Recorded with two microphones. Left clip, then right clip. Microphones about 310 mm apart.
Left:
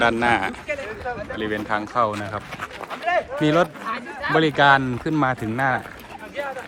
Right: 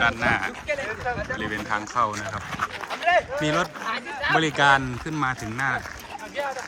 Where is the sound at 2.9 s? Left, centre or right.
Right.